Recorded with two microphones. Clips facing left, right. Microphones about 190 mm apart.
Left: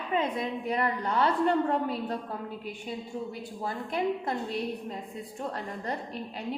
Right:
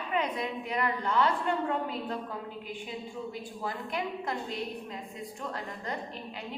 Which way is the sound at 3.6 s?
30° left (ahead or behind).